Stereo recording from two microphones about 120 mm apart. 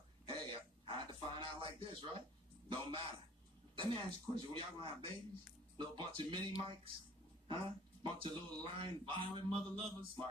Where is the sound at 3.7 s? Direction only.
45° right (ahead or behind).